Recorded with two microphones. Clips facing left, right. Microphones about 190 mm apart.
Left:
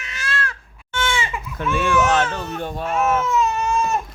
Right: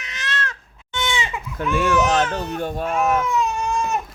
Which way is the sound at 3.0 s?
15° right (ahead or behind).